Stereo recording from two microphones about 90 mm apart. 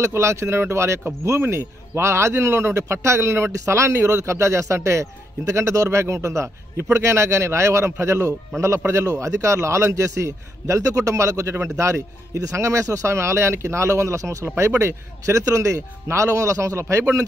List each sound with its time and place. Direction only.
0.0 s speech: 30° right (ahead or behind)